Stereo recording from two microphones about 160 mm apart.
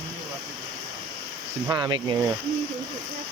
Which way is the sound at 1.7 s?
30° right (ahead or behind).